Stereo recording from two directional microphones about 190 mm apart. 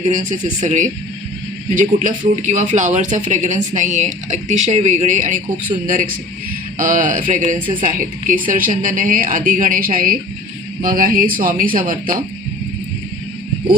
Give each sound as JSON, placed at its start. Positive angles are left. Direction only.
{"t": 0.1, "sound": "speech", "side_deg": -40}